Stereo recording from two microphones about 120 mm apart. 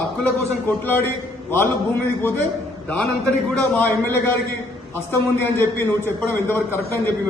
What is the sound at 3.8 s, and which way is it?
Speech, 20° left (ahead or behind).